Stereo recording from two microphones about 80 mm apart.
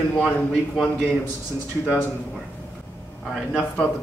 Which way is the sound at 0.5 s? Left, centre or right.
Centre.